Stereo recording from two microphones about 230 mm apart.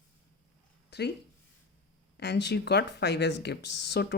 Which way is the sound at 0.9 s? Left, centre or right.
Left.